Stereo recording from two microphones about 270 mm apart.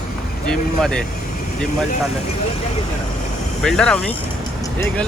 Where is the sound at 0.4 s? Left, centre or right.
Centre.